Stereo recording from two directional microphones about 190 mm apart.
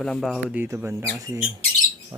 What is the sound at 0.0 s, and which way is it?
Speech, centre (ahead or behind).